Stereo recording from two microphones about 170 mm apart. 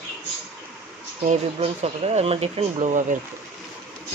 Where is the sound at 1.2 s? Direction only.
40° right (ahead or behind).